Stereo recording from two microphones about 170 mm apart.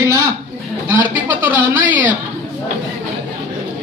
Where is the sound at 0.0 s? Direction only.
20° right (ahead or behind).